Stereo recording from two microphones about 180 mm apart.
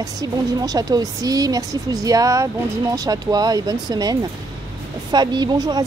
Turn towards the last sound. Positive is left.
turn(degrees=-20)  # may be behind; listen again after turning